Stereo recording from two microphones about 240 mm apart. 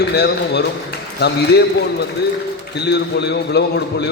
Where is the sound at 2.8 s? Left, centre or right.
Left.